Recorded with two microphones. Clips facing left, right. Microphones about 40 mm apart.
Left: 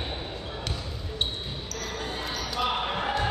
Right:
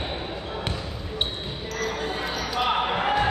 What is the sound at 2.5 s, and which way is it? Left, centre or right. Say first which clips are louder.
Basketball bounce: right 4 dB; right.